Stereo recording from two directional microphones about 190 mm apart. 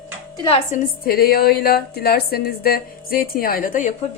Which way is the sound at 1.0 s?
55° left (ahead or behind).